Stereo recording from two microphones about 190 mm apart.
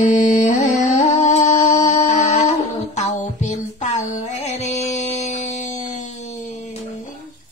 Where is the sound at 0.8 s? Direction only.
40° left (ahead or behind).